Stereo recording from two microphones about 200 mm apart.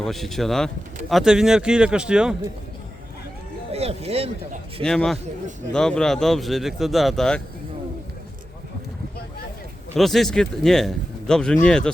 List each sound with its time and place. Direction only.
0.0 s speech: centre (ahead or behind)
3.7 s speech: 30° right (ahead or behind)
4.8 s speech: 5° left (ahead or behind)
9.9 s speech: centre (ahead or behind)